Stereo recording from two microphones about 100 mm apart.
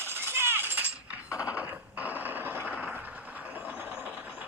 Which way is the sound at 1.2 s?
30° left (ahead or behind).